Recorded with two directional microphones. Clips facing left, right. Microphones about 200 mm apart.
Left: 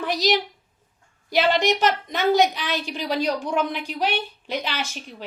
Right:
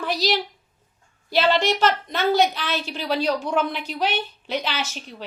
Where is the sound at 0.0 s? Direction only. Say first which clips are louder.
Left 1 dB; 20° left (ahead or behind).